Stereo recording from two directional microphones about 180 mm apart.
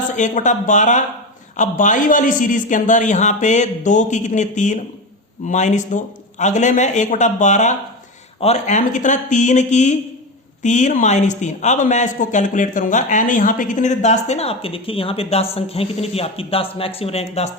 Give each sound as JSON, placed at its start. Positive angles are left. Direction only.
{"t": 0.2, "sound": "a man's voice", "side_deg": 45}